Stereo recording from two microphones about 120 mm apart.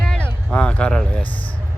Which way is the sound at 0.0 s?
5° left (ahead or behind).